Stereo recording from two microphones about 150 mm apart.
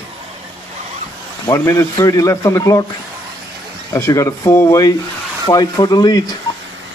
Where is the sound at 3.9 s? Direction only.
20° left (ahead or behind).